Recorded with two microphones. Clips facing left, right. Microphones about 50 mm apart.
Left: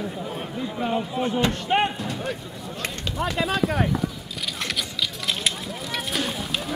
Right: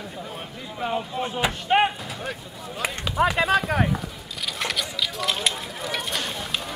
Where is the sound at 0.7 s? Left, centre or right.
Centre.